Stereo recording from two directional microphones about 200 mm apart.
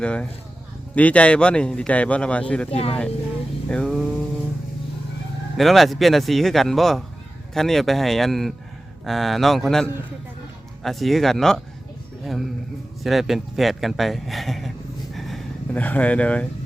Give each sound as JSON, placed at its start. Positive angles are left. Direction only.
{"t": 0.0, "sound": "speech", "side_deg": 5}
{"t": 2.6, "sound": "speech", "side_deg": 30}
{"t": 3.7, "sound": "music", "side_deg": 5}
{"t": 5.5, "sound": "speech", "side_deg": 0}
{"t": 15.1, "sound": "a sound", "side_deg": 0}